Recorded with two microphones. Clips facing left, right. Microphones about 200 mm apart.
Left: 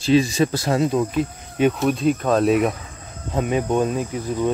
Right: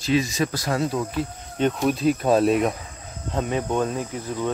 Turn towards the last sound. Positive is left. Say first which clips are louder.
# left 4 dB
turn(degrees=15)  # may be behind; listen again after turning